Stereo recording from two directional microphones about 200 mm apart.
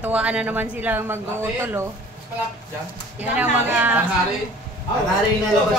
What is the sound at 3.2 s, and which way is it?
Speech, 5° right (ahead or behind).